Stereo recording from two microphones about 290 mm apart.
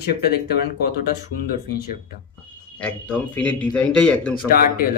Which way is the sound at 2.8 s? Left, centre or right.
Centre.